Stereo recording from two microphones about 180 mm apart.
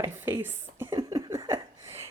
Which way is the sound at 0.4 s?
10° right (ahead or behind).